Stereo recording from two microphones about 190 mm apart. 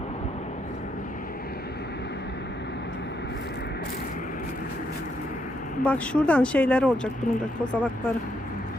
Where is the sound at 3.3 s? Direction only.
60° left (ahead or behind).